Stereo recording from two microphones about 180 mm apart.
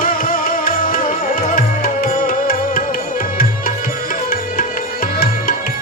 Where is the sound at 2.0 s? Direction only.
50° left (ahead or behind).